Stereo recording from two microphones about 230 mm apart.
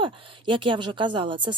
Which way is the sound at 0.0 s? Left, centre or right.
Right.